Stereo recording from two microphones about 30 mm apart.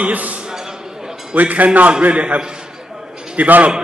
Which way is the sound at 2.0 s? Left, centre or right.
Right.